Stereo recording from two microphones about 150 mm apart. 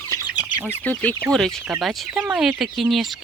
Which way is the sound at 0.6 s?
10° left (ahead or behind).